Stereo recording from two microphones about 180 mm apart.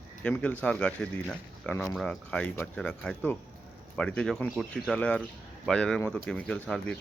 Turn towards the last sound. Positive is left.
turn(degrees=5)  # may be behind; listen again after turning